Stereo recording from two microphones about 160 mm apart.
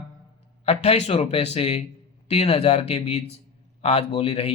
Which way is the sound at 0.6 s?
40° left (ahead or behind).